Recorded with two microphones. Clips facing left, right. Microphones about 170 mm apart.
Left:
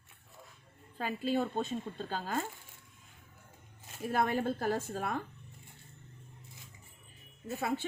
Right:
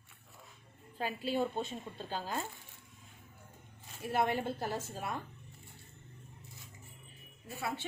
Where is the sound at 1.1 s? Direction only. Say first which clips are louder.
Left 2 dB; 50° left (ahead or behind).